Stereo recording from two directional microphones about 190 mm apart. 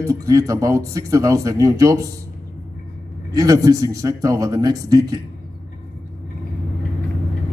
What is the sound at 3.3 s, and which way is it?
A man's voice, 20° right (ahead or behind).